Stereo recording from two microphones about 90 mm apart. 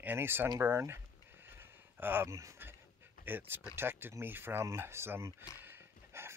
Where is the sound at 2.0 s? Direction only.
25° right (ahead or behind).